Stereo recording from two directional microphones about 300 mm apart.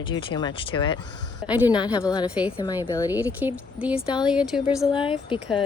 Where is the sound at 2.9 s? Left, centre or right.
Centre.